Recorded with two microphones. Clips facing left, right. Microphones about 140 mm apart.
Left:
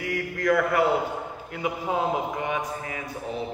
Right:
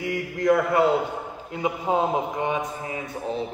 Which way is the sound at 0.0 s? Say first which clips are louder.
Right 2 dB; 25° right (ahead or behind).